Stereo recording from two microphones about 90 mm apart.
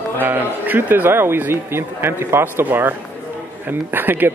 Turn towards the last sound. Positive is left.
turn(degrees=-20)  # may be behind; listen again after turning